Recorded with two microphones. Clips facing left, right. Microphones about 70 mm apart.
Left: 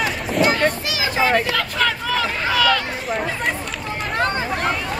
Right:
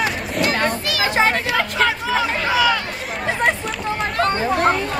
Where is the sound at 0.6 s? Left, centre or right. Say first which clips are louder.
Even; left.